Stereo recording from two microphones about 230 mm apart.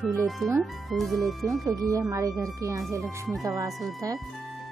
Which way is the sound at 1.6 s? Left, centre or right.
Centre.